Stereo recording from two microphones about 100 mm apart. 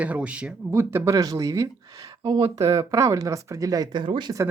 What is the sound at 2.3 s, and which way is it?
Speech, 45° right (ahead or behind).